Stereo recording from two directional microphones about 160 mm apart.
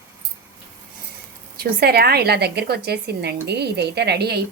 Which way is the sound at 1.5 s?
80° right.